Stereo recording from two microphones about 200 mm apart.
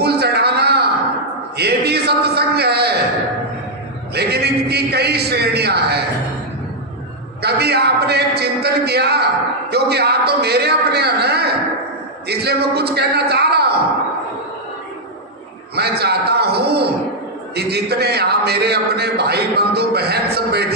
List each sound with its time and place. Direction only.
0.0 s a sound: 55° right (ahead or behind)
4.1 s a man's voice: 55° right (ahead or behind)
7.4 s a man's voice: 55° right (ahead or behind)
15.7 s a man's voice: 55° right (ahead or behind)